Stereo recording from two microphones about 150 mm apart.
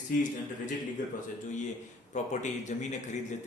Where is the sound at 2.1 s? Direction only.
50° left (ahead or behind).